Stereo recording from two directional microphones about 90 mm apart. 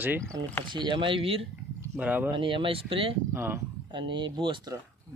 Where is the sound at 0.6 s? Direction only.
60° right (ahead or behind); by 1.5 s 90° right.